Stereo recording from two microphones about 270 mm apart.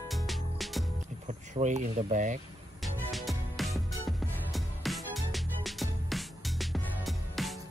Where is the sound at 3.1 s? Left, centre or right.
Centre.